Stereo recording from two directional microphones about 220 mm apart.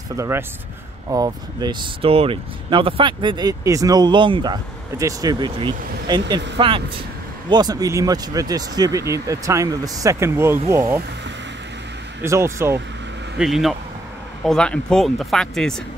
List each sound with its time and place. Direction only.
0.1 s speech: 10° right (ahead or behind)
7.4 s speech: 20° right (ahead or behind)
12.2 s speech: 10° right (ahead or behind)
13.4 s speech: centre (ahead or behind)